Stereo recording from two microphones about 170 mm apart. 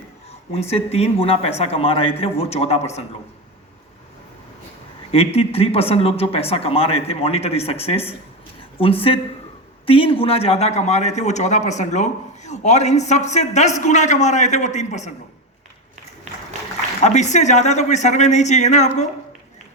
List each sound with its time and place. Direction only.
0.5 s speech: 35° left (ahead or behind)
5.1 s a man's voice: 35° left (ahead or behind)
17.0 s a man's voice: 45° left (ahead or behind)